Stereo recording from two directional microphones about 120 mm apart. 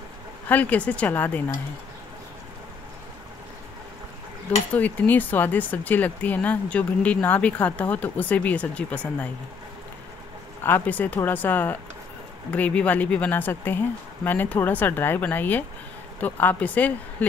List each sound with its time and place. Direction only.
0.5 s speech: 10° left (ahead or behind)
4.7 s speech: 15° left (ahead or behind)
10.6 s speech: 15° left (ahead or behind)